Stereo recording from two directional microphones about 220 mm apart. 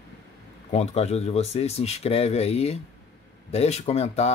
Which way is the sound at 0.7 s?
30° left (ahead or behind).